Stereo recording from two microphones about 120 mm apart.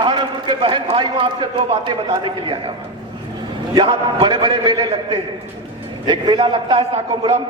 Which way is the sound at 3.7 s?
40° right (ahead or behind).